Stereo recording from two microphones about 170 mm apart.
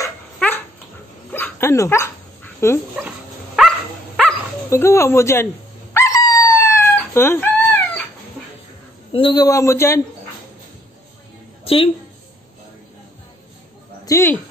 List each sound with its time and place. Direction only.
0.0 s dog: 10° left (ahead or behind)
3.6 s dog: centre (ahead or behind)
4.6 s a man's voice: 15° left (ahead or behind)
5.9 s dog: 20° left (ahead or behind)
7.2 s chicken: 10° left (ahead or behind)
9.1 s a man's voice: 25° left (ahead or behind)
11.6 s a sound: 35° left (ahead or behind)
14.0 s speech: 15° left (ahead or behind)